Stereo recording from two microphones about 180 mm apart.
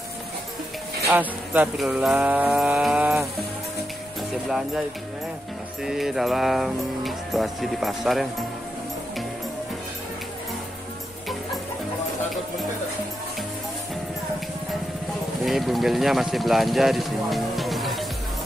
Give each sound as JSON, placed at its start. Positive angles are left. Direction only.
{"t": 1.1, "sound": "a sound", "side_deg": -10}
{"t": 4.5, "sound": "speech", "side_deg": 0}
{"t": 5.9, "sound": "speech", "side_deg": 0}
{"t": 15.4, "sound": "speech", "side_deg": 0}